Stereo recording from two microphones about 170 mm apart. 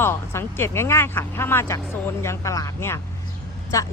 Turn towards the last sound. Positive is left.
turn(degrees=20)  # may be behind; listen again after turning